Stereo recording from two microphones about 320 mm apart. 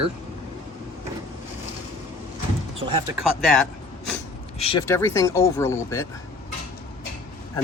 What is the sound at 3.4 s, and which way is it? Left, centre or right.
Speech, centre.